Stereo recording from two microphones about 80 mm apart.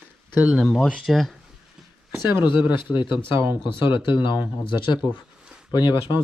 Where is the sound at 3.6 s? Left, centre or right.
Left.